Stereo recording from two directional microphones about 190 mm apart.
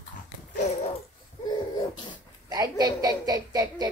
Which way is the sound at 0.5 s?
40° left (ahead or behind).